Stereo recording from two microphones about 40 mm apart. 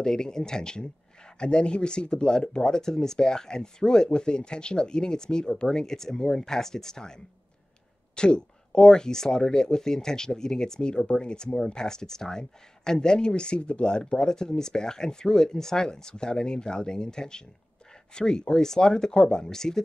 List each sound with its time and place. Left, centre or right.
0.0 s speech: centre
8.2 s speech: left